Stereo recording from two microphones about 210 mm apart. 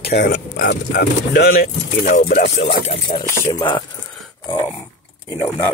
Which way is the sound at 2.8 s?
20° left (ahead or behind).